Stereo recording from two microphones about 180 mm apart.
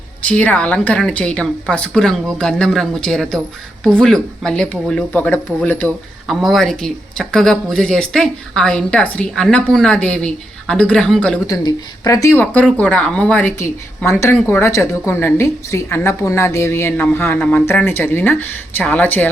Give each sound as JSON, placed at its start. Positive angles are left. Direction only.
{"t": 0.2, "sound": "speech", "side_deg": 10}
{"t": 11.4, "sound": "a woman's voice", "side_deg": 20}